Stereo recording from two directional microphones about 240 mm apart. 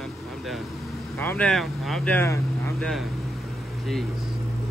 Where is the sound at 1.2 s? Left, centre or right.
Centre.